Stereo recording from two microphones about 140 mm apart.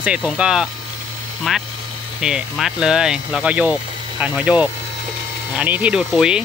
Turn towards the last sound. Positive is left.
turn(degrees=-5)  # may be behind; listen again after turning